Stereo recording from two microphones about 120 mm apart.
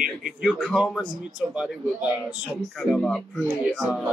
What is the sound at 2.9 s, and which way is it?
Speech, 5° left (ahead or behind).